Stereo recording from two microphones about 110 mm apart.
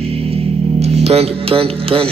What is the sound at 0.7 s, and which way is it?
Music, 70° right (ahead or behind).